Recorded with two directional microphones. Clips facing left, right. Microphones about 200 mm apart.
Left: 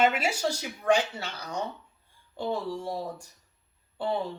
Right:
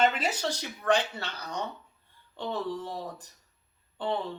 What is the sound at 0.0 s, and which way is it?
Speech, 10° left (ahead or behind).